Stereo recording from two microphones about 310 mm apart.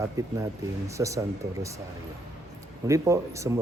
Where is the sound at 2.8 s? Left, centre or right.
Centre.